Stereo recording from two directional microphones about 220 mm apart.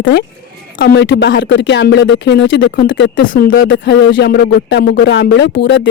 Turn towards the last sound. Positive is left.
turn(degrees=50)  # may be behind; listen again after turning